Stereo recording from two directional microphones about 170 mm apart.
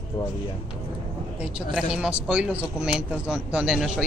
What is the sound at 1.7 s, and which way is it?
A man's voice, 5° right (ahead or behind).